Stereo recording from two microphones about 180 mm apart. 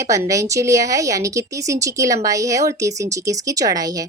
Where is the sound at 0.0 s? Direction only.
15° right (ahead or behind).